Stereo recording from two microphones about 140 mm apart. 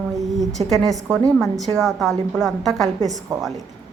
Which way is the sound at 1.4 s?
Centre (ahead or behind).